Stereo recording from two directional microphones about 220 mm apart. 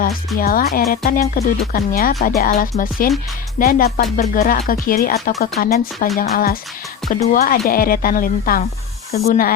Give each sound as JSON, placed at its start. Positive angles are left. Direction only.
{"t": 0.3, "sound": "speech", "side_deg": 40}
{"t": 7.0, "sound": "music", "side_deg": 0}
{"t": 7.3, "sound": "speech", "side_deg": 40}